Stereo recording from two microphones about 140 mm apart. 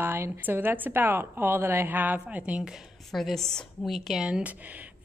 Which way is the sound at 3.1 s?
Centre (ahead or behind).